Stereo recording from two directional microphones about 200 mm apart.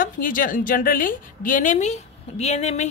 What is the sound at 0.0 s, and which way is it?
A woman's voice, 45° left (ahead or behind).